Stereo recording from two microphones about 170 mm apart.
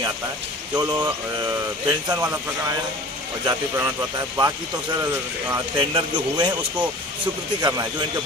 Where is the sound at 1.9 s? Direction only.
25° right (ahead or behind).